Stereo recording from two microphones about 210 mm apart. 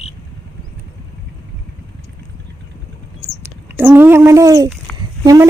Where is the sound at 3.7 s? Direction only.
10° right (ahead or behind).